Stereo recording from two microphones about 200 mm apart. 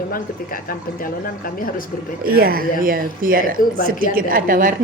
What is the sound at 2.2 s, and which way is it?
Speech, 50° right (ahead or behind).